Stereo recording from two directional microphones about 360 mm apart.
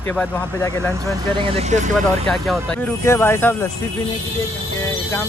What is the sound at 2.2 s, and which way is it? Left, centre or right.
Speech, centre.